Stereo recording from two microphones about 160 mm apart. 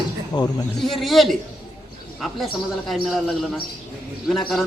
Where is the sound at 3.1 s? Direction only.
Centre (ahead or behind).